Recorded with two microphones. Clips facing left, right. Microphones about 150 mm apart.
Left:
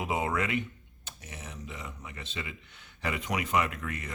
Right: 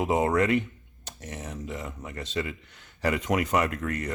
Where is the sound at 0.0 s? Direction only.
40° right (ahead or behind).